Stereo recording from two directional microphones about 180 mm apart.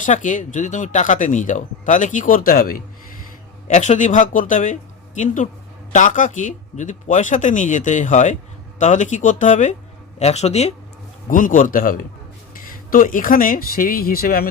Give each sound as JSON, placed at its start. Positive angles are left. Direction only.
{"t": 0.0, "sound": "speech", "side_deg": 45}
{"t": 3.7, "sound": "speech", "side_deg": 40}
{"t": 11.3, "sound": "speech", "side_deg": 50}